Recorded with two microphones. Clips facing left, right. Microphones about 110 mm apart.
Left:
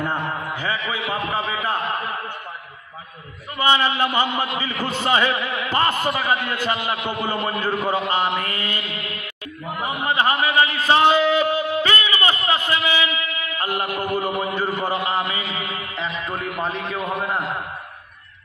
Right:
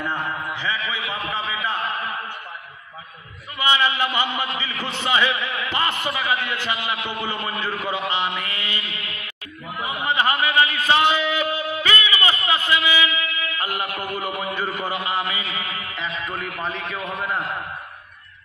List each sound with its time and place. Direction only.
0.0 s a sound: 45° left (ahead or behind)
3.5 s a man's voice: 45° left (ahead or behind)
9.8 s a man's voice: 35° left (ahead or behind)
14.1 s a man's voice: 35° left (ahead or behind)